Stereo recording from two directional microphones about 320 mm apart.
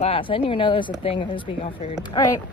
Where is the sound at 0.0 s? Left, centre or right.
Centre.